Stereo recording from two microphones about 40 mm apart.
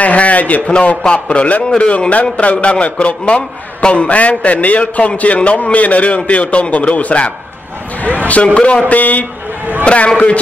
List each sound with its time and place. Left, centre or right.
0.0 s a man's voice: left
0.7 s a man's voice: left
8.8 s a man's voice: left
9.8 s a man's voice: left